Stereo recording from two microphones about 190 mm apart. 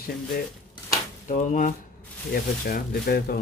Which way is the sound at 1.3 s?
40° left (ahead or behind).